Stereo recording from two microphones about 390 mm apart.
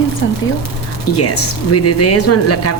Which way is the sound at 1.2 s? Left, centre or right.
Left.